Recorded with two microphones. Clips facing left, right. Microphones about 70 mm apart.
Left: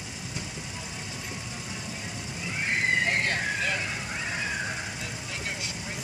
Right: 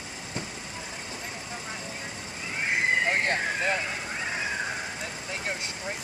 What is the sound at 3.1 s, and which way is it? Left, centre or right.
Vehicle, right.